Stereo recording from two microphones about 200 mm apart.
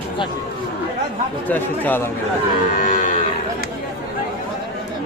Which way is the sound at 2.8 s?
40° left (ahead or behind).